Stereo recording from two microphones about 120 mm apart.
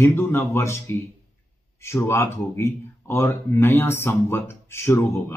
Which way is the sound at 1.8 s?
20° left (ahead or behind).